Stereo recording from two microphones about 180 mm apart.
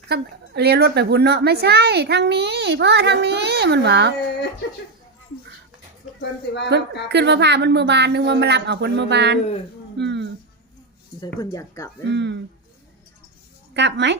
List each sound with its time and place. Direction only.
0.1 s a woman's voice: 65° right (ahead or behind)
6.1 s speech: 75° left (ahead or behind)
7.1 s a woman's voice: 70° right (ahead or behind)
11.3 s speech: 15° left (ahead or behind)
12.0 s a woman's voice: 75° right (ahead or behind)
13.7 s a woman's voice: 75° right (ahead or behind)